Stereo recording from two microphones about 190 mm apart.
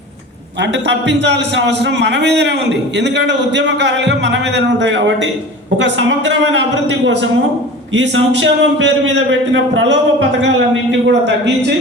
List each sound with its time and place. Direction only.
0.6 s a man's voice: 65° right (ahead or behind)